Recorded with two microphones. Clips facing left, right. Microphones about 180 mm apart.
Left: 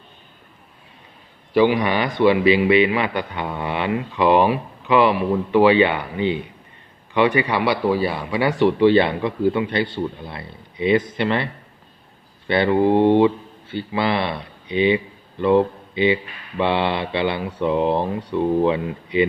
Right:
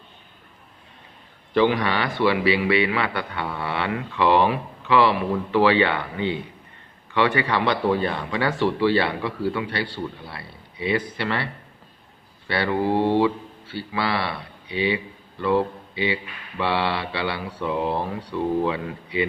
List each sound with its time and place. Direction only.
1.5 s a man's voice: 10° left (ahead or behind)
12.5 s speech: 20° left (ahead or behind)